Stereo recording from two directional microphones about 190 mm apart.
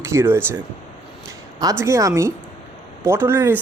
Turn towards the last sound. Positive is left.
turn(degrees=-10)  # may be behind; listen again after turning